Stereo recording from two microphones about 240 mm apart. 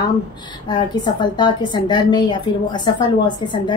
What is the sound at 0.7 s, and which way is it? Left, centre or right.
A woman's voice, centre.